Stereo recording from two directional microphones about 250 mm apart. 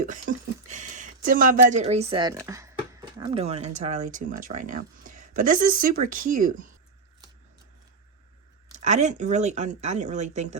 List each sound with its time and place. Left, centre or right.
0.0 s speech: right
2.5 s a sound: centre
3.2 s speech: right
8.8 s speech: right